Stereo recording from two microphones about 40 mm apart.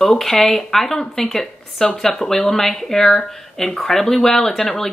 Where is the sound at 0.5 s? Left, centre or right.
Centre.